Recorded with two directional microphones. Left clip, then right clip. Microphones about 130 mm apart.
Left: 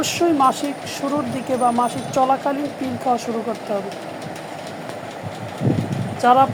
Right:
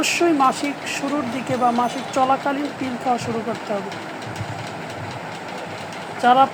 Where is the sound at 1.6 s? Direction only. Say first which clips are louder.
Left 1 dB; 5° right (ahead or behind).